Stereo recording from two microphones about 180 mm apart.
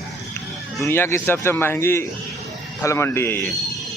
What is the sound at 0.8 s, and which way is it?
Speech, 15° left (ahead or behind).